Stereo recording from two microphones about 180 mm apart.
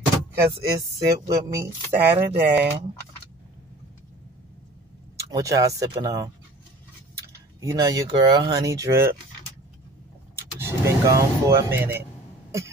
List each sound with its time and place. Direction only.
0.4 s speech: 15° right (ahead or behind)
2.0 s speech: 10° right (ahead or behind)
5.3 s speech: 20° right (ahead or behind)
7.7 s speech: 20° right (ahead or behind)
10.3 s vehicle: 15° right (ahead or behind)
12.4 s throat clearing: 15° right (ahead or behind)